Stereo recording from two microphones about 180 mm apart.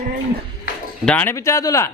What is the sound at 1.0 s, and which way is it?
Speech, 10° left (ahead or behind).